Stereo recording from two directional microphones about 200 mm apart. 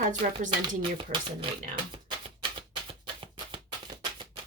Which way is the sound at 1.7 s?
25° right (ahead or behind).